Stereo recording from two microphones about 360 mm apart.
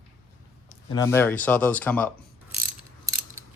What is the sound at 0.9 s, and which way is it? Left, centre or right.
Speech, centre.